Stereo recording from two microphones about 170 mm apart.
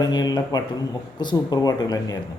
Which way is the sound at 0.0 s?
25° left (ahead or behind).